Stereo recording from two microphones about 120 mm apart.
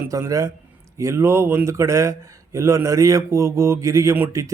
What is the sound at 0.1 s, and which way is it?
Speech, 25° right (ahead or behind).